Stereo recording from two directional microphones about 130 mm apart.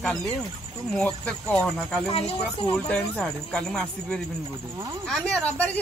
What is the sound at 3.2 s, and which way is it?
A woman's voice, 5° left (ahead or behind).